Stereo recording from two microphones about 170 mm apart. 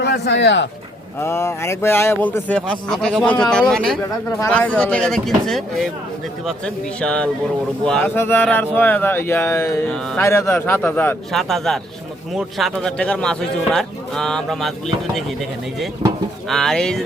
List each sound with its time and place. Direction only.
0.0 s speech: 80° left
1.2 s speech: 15° left (ahead or behind)
4.3 s speech: 15° left (ahead or behind)